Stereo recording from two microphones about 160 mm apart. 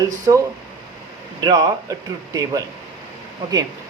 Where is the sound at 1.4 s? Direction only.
25° right (ahead or behind).